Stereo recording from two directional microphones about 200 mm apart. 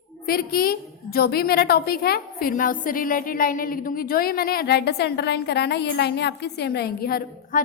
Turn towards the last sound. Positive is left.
turn(degrees=50)  # may be behind; listen again after turning